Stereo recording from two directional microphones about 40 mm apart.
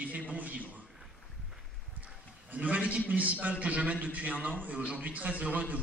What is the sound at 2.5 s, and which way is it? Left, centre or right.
A man's voice, right.